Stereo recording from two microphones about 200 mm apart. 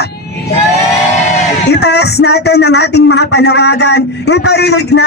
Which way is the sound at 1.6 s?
55° left (ahead or behind).